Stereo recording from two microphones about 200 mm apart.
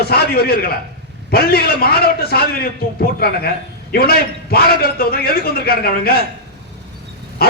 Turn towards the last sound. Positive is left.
turn(degrees=50)  # may be behind; listen again after turning